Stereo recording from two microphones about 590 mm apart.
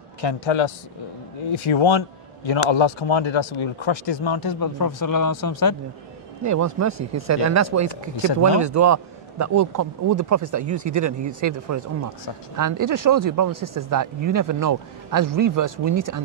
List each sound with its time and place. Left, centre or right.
0.3 s a man's voice: left
1.7 s a man's voice: left
6.4 s a man's voice: right